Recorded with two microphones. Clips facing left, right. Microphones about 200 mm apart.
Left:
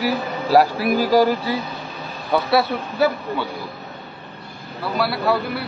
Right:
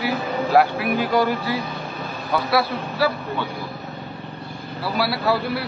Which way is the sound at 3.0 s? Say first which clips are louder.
Left 3 dB; 20° left (ahead or behind).